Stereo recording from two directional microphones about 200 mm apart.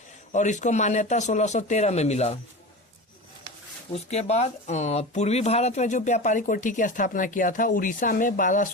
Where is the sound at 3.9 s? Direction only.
35° left (ahead or behind).